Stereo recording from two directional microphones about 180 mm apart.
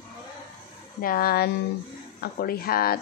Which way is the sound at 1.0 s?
55° left (ahead or behind).